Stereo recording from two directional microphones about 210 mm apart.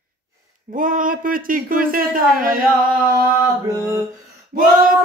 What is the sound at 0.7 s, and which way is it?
Speech, 40° right (ahead or behind).